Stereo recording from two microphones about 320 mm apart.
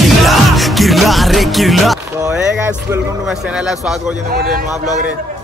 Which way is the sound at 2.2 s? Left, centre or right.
Centre.